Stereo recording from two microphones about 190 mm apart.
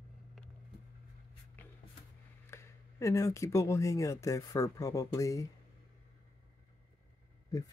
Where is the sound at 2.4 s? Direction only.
15° left (ahead or behind).